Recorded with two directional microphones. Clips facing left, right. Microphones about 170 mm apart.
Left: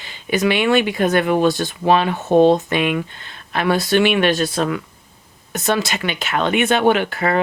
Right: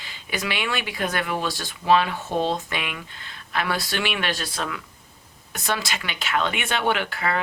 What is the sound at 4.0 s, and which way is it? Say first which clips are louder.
Speech: left 11 dB; 55° left (ahead or behind).